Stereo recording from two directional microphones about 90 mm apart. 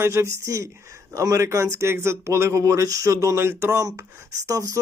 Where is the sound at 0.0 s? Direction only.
30° right (ahead or behind).